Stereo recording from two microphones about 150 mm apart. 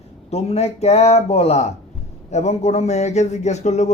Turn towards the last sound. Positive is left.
turn(degrees=50)  # may be behind; listen again after turning